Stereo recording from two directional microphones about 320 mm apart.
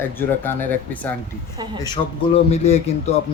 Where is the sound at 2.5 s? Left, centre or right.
Centre.